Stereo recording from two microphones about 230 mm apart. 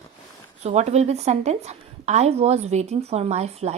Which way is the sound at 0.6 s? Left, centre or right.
Right.